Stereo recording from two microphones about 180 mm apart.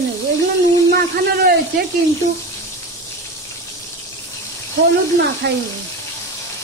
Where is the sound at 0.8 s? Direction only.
60° right (ahead or behind).